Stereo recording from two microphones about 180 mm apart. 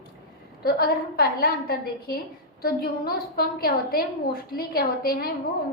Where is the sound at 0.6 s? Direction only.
55° left (ahead or behind).